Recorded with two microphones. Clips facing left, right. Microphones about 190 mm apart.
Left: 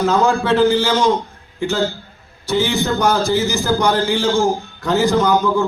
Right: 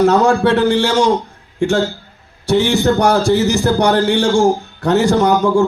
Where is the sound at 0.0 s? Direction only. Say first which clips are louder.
Right 5 dB; 75° right (ahead or behind).